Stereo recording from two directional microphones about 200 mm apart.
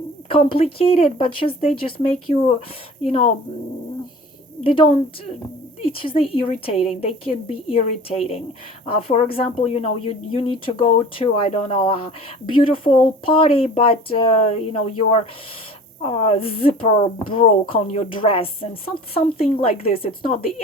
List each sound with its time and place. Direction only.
0.3 s speech: 25° left (ahead or behind)
4.6 s speech: 25° left (ahead or behind)